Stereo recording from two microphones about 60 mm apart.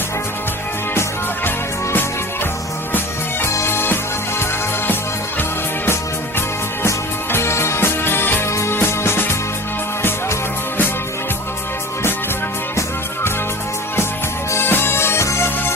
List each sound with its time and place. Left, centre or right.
1.5 s music: left
3.5 s music: left
5.4 s music: left
8.4 s music: left
8.7 s music: left
14.5 s music: left